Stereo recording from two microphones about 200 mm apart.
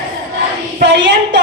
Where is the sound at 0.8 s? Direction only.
60° right (ahead or behind).